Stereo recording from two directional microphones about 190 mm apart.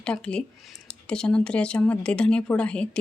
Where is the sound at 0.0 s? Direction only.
5° left (ahead or behind).